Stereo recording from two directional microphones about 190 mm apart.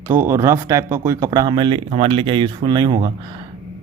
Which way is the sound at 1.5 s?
25° right (ahead or behind).